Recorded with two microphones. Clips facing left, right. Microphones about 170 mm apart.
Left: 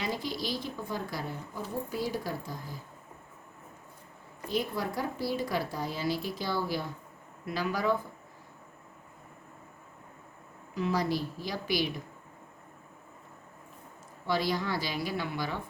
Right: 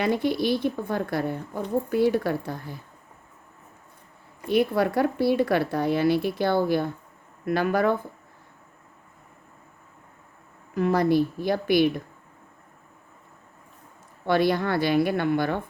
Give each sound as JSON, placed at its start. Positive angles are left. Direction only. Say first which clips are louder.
{"t": 0.0, "sound": "speech", "louder": "right 11 dB", "side_deg": -60}
{"t": 4.4, "sound": "speech", "louder": "right 10 dB", "side_deg": -65}
{"t": 10.8, "sound": "speech", "louder": "right 9 dB", "side_deg": -55}
{"t": 14.3, "sound": "speech", "louder": "right 8 dB", "side_deg": -60}